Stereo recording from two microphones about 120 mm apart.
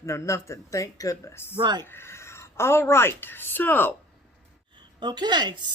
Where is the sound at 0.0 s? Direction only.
25° left (ahead or behind).